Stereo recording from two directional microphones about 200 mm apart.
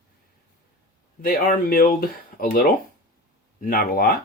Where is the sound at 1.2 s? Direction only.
45° left (ahead or behind).